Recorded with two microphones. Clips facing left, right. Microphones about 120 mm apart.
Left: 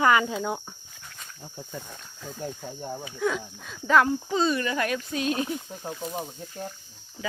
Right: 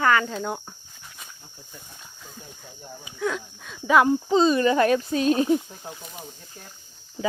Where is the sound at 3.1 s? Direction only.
Centre (ahead or behind).